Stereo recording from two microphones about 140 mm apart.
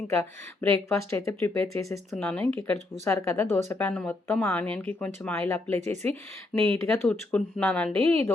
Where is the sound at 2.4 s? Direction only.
15° left (ahead or behind).